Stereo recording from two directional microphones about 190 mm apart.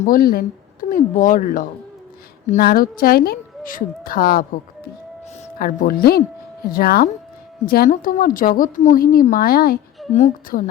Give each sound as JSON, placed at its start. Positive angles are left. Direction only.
{"t": 0.0, "sound": "a woman's voice", "side_deg": 50}
{"t": 10.1, "sound": "a woman's voice", "side_deg": 40}